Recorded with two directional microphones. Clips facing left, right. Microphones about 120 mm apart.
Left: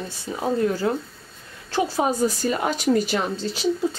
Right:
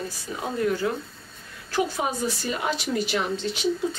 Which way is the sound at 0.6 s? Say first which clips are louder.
Right 1 dB; 35° left (ahead or behind).